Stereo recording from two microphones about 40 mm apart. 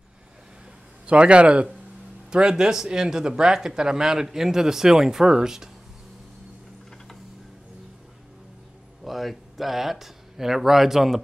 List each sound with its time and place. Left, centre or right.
1.0 s a man's voice: right
2.3 s speech: centre
9.0 s speech: centre